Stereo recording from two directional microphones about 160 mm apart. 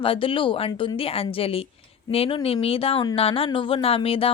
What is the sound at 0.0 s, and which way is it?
Speech, 35° left (ahead or behind).